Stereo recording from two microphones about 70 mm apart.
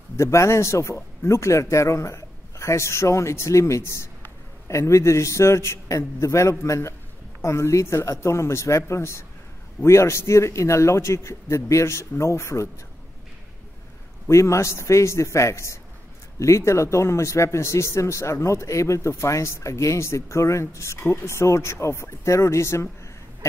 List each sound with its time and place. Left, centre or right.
0.2 s speech: left
14.3 s speech: left